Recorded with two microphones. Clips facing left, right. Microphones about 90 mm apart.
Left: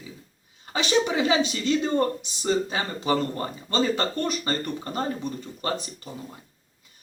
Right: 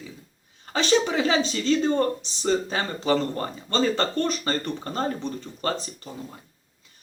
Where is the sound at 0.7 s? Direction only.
15° left (ahead or behind).